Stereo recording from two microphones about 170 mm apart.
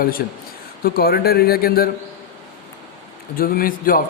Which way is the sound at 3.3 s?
55° left (ahead or behind).